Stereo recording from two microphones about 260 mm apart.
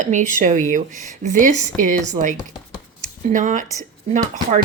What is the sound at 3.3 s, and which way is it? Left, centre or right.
A woman's voice, right.